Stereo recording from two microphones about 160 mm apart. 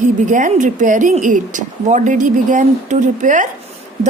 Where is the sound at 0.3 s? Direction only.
50° right (ahead or behind).